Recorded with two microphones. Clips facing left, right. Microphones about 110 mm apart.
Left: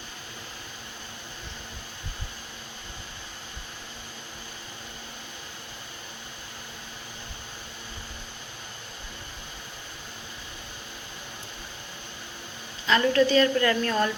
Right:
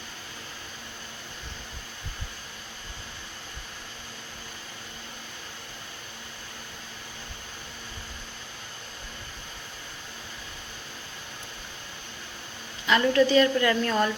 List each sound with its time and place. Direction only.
12.9 s a woman's voice: 15° right (ahead or behind)